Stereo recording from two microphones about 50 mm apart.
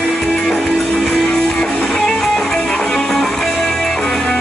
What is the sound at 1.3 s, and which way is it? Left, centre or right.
Music, centre.